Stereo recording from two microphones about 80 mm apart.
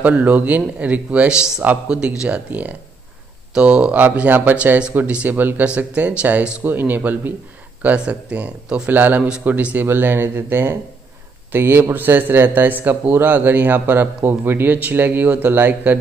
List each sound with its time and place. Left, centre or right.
0.0 s a man's voice: centre